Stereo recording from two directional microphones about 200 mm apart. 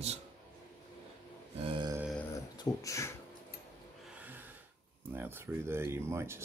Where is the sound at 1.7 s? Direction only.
25° right (ahead or behind).